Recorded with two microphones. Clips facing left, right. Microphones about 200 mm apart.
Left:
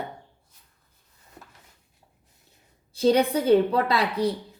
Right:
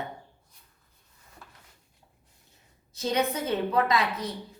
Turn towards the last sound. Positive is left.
turn(degrees=30)  # may be behind; listen again after turning